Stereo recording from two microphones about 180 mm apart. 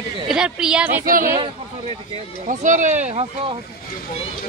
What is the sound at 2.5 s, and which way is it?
Speech, 45° right (ahead or behind).